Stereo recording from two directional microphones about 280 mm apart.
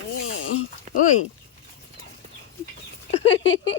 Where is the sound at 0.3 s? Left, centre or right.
Left.